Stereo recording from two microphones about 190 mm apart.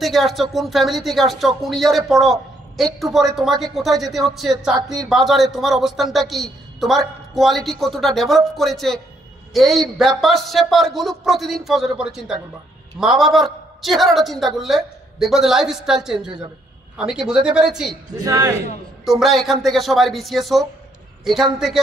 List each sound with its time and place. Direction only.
0.0 s a man's voice: centre (ahead or behind)
18.2 s a man's voice: 20° right (ahead or behind)
19.0 s a man's voice: centre (ahead or behind)